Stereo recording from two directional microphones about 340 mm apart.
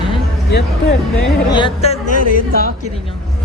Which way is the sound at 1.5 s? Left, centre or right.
Centre.